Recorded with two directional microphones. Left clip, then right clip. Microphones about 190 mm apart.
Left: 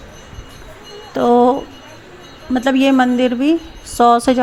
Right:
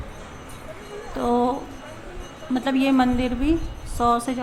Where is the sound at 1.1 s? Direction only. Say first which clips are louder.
Left 10 dB; 35° left (ahead or behind).